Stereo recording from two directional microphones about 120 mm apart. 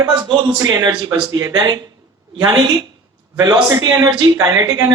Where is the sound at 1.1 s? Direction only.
15° right (ahead or behind).